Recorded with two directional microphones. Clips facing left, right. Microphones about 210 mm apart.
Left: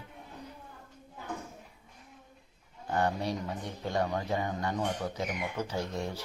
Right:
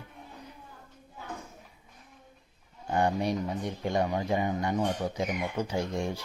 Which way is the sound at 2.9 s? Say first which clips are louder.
Right 3 dB; 15° right (ahead or behind).